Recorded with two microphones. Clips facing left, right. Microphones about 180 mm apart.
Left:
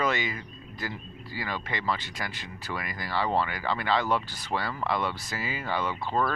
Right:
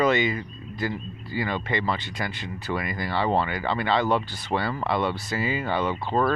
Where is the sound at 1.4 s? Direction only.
20° right (ahead or behind).